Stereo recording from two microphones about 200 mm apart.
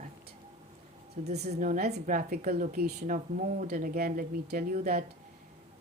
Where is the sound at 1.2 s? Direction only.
40° right (ahead or behind).